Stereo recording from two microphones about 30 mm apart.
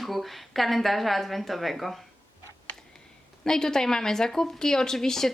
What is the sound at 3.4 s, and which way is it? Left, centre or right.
Speech, centre.